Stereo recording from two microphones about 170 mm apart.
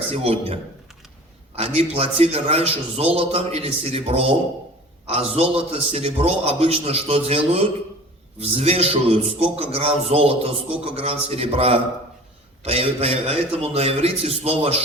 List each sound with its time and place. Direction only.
0.1 s a man's voice: 35° right (ahead or behind)